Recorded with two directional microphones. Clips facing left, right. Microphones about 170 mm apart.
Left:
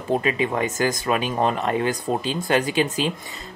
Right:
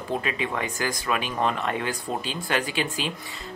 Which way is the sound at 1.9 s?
20° left (ahead or behind).